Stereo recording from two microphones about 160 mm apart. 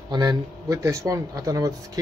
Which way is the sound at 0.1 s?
25° right (ahead or behind).